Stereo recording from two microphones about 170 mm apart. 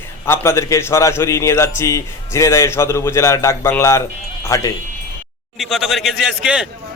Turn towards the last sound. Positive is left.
turn(degrees=-5)  # may be behind; listen again after turning